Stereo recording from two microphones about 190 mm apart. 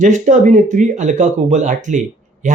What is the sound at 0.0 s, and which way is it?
Speech, 40° right (ahead or behind).